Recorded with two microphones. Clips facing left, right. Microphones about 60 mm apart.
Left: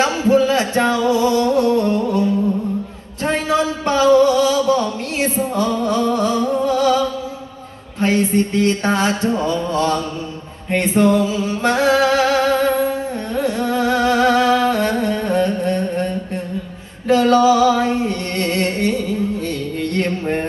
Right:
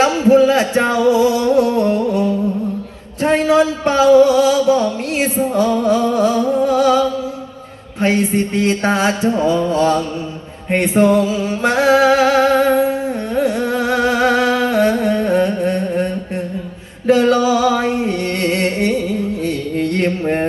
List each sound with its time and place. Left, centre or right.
0.0 s music: centre
3.2 s a sound: centre
3.5 s music: centre
7.9 s a sound: centre
17.3 s music: centre
18.4 s music: centre